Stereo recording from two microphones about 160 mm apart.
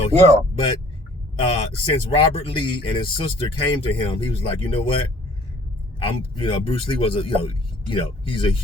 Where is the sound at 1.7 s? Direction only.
35° left (ahead or behind).